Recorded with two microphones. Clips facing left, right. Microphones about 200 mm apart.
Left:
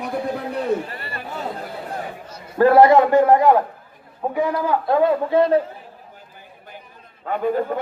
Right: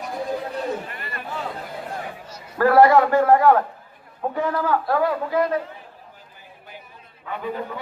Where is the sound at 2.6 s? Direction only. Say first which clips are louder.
Left 2 dB; 20° left (ahead or behind).